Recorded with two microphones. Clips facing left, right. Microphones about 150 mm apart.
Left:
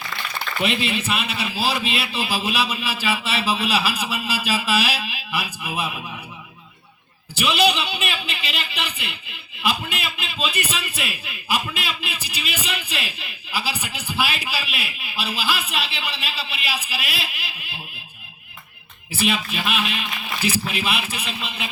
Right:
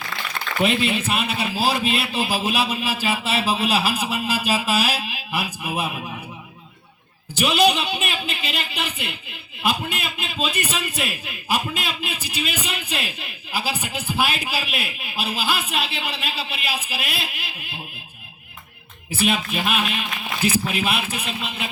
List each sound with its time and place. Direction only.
0.6 s a man's voice: 45° right (ahead or behind)
7.3 s a man's voice: 45° right (ahead or behind)
19.2 s a man's voice: 50° right (ahead or behind)